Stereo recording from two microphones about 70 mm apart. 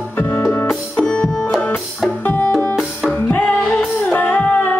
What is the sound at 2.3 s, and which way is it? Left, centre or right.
Music, left.